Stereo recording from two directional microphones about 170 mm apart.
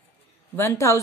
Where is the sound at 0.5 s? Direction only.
15° left (ahead or behind).